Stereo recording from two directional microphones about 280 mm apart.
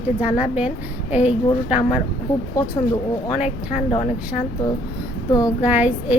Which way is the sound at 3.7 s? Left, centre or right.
Left.